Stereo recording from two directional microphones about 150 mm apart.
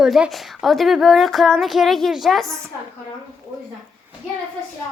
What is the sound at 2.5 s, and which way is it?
Speech, 20° right (ahead or behind).